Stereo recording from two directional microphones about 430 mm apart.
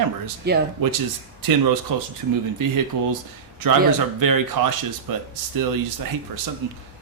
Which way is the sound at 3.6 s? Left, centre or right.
Right.